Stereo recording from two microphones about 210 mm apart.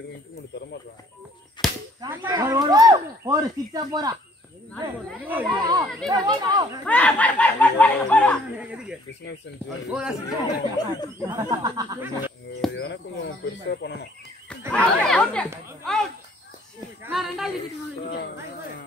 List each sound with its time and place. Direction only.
1.6 s speech: 20° left (ahead or behind)
2.0 s speech: 15° right (ahead or behind)
5.5 s speech: 20° right (ahead or behind)
6.9 s speech: 5° left (ahead or behind)
8.5 s speech: 5° right (ahead or behind)
10.8 s speech: 20° left (ahead or behind)
11.2 s speech: 15° right (ahead or behind)
12.7 s speech: 55° left (ahead or behind)
14.7 s speech: 5° left (ahead or behind)
15.8 s a sound: 5° left (ahead or behind)
17.0 s speech: centre (ahead or behind)
18.0 s speech: 50° left (ahead or behind)